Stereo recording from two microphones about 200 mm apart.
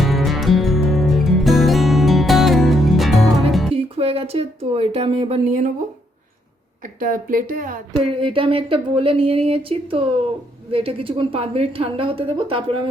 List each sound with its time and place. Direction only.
0.0 s music: centre (ahead or behind)
3.8 s speech: 30° right (ahead or behind)
6.8 s a woman's voice: 45° right (ahead or behind)
8.0 s speech: 25° right (ahead or behind)